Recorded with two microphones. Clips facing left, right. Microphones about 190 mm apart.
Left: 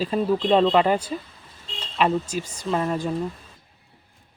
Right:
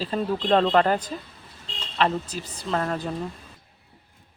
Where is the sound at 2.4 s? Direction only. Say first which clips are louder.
Left 5 dB; 35° right (ahead or behind).